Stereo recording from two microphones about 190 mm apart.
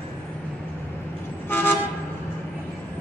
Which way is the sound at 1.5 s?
10° left (ahead or behind).